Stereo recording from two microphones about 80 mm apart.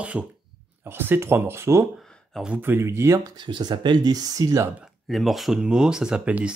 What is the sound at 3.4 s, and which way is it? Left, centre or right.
Speech, right.